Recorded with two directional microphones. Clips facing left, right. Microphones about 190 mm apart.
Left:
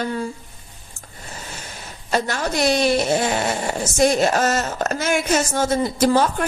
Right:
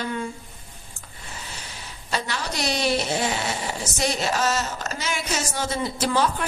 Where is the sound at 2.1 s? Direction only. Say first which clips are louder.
Left 7 dB; 45° left (ahead or behind).